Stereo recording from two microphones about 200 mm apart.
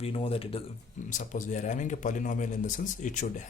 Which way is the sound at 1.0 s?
40° left (ahead or behind).